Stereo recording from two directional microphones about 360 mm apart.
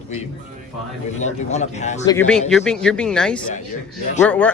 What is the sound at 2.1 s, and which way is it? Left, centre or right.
Speech, centre.